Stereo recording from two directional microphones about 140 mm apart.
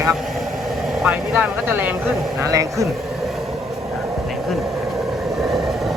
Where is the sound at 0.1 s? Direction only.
Centre (ahead or behind).